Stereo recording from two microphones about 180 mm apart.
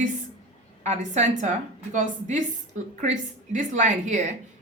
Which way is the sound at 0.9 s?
40° right (ahead or behind).